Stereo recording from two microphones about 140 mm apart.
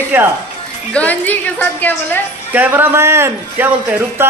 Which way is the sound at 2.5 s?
15° right (ahead or behind).